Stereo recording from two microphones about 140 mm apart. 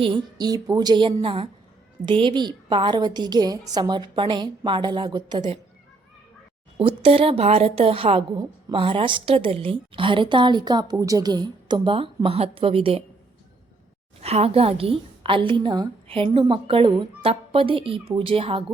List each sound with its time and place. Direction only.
0.0 s speech: 35° right (ahead or behind)
6.7 s speech: 40° right (ahead or behind)
14.2 s a woman's voice: 45° right (ahead or behind)